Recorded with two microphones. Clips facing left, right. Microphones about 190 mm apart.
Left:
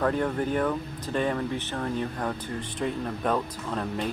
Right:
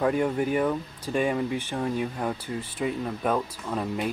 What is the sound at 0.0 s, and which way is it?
Speech, 10° right (ahead or behind).